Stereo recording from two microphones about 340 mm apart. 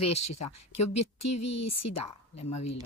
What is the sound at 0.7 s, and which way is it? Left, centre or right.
Speech, left.